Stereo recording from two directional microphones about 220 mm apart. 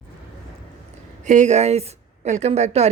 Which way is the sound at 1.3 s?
35° right (ahead or behind).